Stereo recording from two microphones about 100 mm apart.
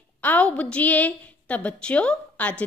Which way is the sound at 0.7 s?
15° left (ahead or behind).